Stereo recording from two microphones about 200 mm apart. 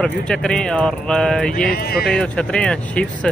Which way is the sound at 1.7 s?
50° left (ahead or behind).